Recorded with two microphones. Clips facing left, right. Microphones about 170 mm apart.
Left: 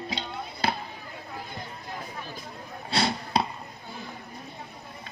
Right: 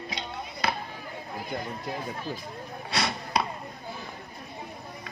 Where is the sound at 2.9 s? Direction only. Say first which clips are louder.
Left 3 dB; 30° left (ahead or behind).